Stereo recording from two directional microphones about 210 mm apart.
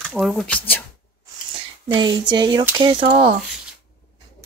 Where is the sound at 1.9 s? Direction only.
20° right (ahead or behind).